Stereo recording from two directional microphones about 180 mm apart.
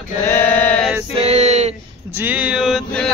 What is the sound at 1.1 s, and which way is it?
Male singing, 35° right (ahead or behind).